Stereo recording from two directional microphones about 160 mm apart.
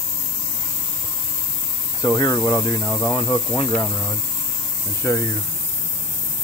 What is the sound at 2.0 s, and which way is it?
Speech, 20° left (ahead or behind).